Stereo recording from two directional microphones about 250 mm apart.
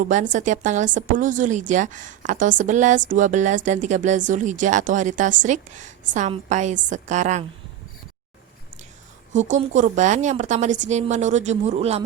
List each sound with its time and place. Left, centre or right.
0.0 s a woman's voice: right
9.3 s a woman's voice: right